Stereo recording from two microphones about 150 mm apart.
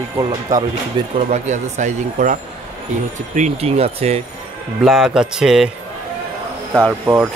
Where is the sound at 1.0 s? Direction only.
30° right (ahead or behind).